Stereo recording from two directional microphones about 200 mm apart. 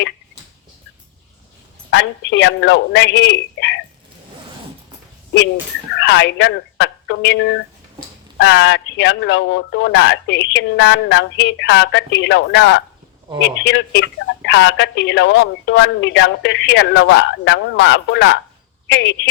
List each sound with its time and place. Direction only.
1.9 s speech: 60° left (ahead or behind)
6.0 s speech: 60° left (ahead or behind)